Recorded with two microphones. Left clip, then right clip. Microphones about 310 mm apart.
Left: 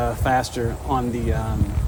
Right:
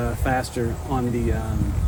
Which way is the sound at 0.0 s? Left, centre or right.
Centre.